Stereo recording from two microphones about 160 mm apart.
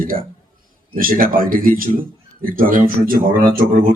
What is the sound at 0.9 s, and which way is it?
Speech, 60° right (ahead or behind).